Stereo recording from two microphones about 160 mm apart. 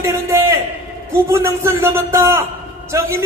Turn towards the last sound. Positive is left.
turn(degrees=-15)  # may be behind; listen again after turning